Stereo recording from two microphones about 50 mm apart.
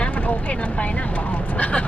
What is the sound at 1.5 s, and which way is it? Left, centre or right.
Speech, left.